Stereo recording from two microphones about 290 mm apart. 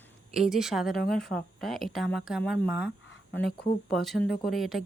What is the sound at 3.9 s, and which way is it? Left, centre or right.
Speech, centre.